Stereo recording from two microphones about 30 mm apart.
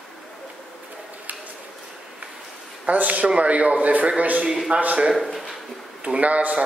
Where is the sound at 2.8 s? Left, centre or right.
Right.